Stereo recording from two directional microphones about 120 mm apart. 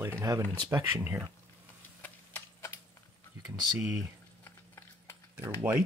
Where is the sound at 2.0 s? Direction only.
20° left (ahead or behind).